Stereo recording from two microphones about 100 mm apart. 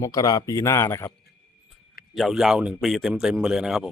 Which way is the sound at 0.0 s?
40° left (ahead or behind).